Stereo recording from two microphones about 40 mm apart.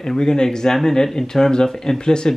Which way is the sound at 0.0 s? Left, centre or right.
Centre.